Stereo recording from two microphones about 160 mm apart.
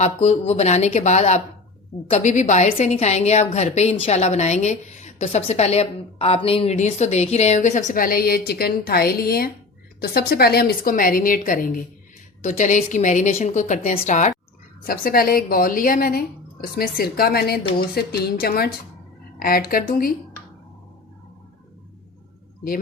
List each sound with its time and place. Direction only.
0.0 s a woman's voice: 45° left (ahead or behind)
14.8 s a woman's voice: 65° left (ahead or behind)